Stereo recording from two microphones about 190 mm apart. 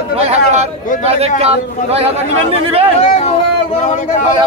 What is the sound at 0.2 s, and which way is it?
A man's voice, 35° right (ahead or behind).